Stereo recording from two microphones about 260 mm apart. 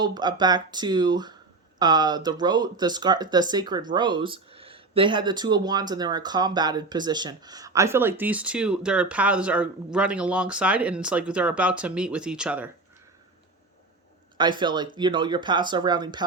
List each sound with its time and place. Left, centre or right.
0.0 s speech: centre
14.3 s speech: centre